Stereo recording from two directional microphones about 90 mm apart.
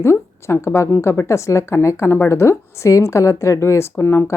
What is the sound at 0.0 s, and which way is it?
A woman's voice, 30° left (ahead or behind).